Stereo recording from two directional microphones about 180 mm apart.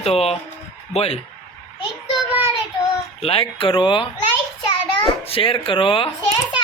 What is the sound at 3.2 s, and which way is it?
Speech, 30° left (ahead or behind).